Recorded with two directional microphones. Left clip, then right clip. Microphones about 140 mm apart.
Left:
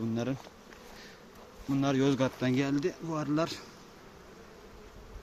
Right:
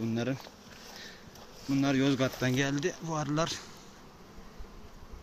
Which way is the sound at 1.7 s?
30° left (ahead or behind).